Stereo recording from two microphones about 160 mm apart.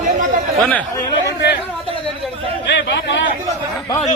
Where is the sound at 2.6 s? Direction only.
90° left.